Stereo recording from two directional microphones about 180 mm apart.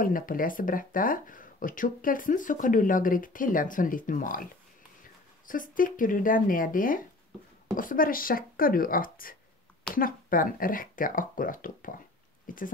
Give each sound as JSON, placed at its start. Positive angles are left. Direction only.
{"t": 0.0, "sound": "speech", "side_deg": 50}
{"t": 5.5, "sound": "speech", "side_deg": 50}